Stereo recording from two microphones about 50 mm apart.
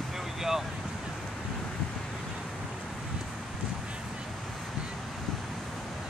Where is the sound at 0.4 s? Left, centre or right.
Centre.